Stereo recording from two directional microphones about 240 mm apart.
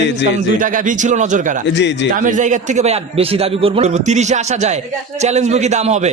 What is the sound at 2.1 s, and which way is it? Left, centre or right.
A man's voice, right.